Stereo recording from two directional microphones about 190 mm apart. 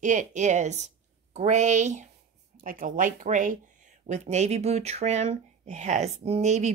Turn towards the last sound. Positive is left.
turn(degrees=-35)  # may be behind; listen again after turning